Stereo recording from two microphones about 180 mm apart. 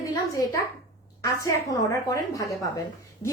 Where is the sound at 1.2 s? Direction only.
20° left (ahead or behind).